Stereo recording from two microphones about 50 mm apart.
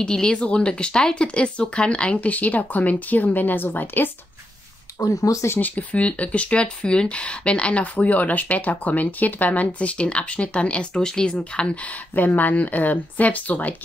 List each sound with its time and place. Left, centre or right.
0.0 s speech: centre; by 4.1 s left
4.9 s speech: left
5.6 s speech: left
12.2 s speech: left